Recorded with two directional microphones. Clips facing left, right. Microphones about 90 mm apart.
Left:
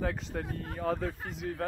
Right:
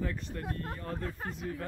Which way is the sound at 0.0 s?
90° left.